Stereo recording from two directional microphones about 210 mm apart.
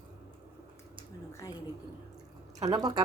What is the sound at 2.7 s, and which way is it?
Speech, 20° right (ahead or behind).